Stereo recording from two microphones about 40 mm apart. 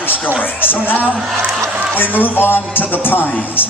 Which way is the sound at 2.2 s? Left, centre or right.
Left.